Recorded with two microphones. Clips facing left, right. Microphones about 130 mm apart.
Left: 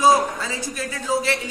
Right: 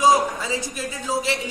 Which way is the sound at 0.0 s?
15° right (ahead or behind).